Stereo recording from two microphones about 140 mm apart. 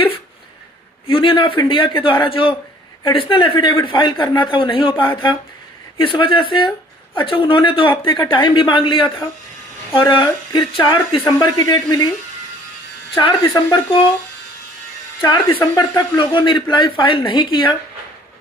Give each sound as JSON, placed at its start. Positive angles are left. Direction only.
{"t": 1.0, "sound": "a man's voice", "side_deg": 35}
{"t": 13.1, "sound": "a man's voice", "side_deg": 30}
{"t": 15.2, "sound": "a man's voice", "side_deg": 30}